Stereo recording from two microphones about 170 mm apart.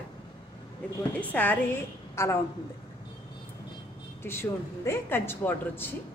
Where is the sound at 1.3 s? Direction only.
10° left (ahead or behind).